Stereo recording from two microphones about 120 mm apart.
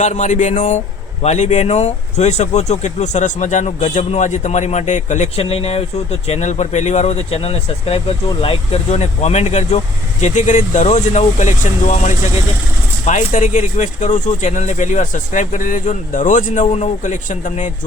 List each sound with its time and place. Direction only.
0.0 s speech: 90° left
1.2 s speech: 75° left (ahead or behind); by 17.7 s 90° left